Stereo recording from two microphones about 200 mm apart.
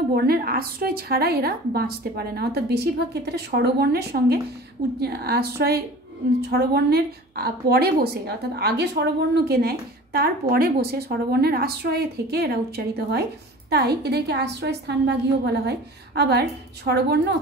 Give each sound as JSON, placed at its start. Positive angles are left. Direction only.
{"t": 0.1, "sound": "a woman's voice", "side_deg": -50}